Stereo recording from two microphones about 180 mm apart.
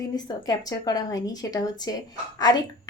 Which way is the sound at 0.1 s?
20° left (ahead or behind).